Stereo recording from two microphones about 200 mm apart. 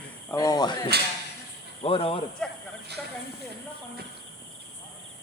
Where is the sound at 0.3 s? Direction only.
15° left (ahead or behind).